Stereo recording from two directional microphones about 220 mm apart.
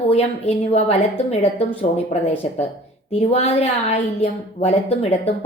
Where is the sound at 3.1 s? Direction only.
30° left (ahead or behind).